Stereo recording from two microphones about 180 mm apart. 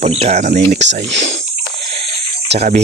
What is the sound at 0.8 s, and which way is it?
Speech, 80° right.